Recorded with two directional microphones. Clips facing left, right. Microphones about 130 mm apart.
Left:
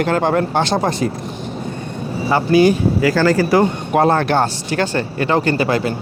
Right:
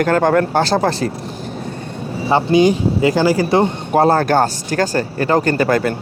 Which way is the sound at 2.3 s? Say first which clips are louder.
Even; 20° right (ahead or behind).